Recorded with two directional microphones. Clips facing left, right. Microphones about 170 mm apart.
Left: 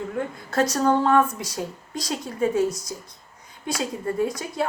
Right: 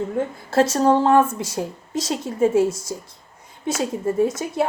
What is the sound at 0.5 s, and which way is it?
A woman's voice, 25° right (ahead or behind).